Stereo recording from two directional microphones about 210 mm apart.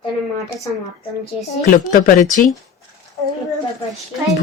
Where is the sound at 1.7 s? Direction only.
40° left (ahead or behind).